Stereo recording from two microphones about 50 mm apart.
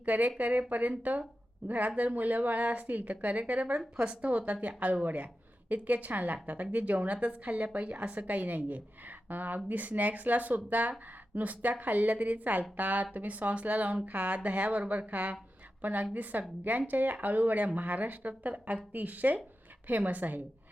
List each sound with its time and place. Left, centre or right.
0.0 s speech: right
3.8 s speech: centre; by 20.4 s right